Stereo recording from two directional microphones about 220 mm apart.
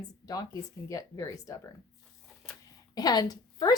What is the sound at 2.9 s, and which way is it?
Speech, 15° left (ahead or behind).